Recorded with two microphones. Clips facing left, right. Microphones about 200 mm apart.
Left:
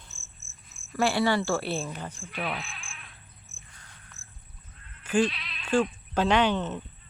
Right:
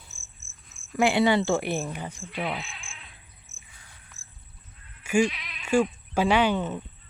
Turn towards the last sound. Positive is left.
turn(degrees=-10)  # may be behind; listen again after turning